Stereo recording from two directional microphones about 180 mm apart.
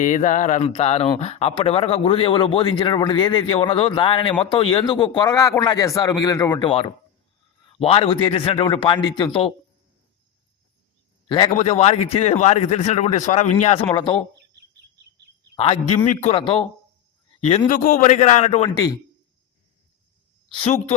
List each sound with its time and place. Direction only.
0.0 s speech: 45° left (ahead or behind); by 6.6 s 20° left (ahead or behind)
6.6 s speech: 30° left (ahead or behind)
11.5 s a man's voice: 35° left (ahead or behind)
15.5 s a man's voice: 30° left (ahead or behind)
17.7 s a man's voice: 50° left (ahead or behind)
18.7 s speech: 20° left (ahead or behind)
20.6 s a man's voice: 35° left (ahead or behind)